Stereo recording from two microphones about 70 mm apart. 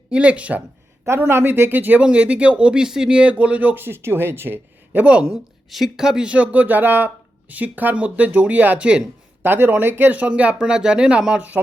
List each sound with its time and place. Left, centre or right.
0.1 s speech: centre
1.0 s speech: right
5.3 s speech: centre
9.4 s speech: right; by 11.4 s centre